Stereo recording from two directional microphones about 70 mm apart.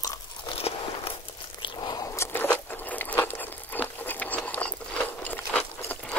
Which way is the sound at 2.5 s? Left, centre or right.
Left.